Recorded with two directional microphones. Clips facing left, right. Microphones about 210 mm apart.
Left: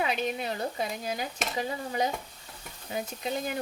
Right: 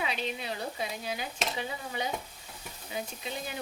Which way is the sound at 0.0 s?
50° left (ahead or behind).